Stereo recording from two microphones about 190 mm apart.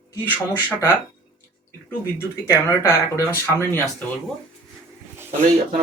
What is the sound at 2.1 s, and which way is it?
Speech, 15° left (ahead or behind).